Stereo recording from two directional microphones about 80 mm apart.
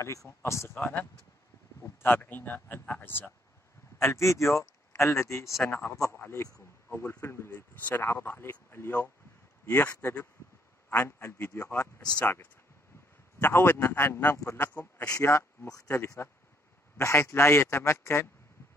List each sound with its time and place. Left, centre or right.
0.4 s speech: left
0.7 s speech: left
4.0 s speech: left
5.6 s speech: left
13.4 s speech: left
14.6 s speech: left
15.0 s speech: left